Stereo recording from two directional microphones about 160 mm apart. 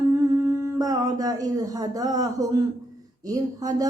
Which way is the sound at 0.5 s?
20° right (ahead or behind).